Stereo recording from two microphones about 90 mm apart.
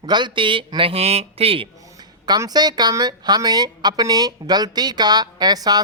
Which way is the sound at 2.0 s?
50° right (ahead or behind).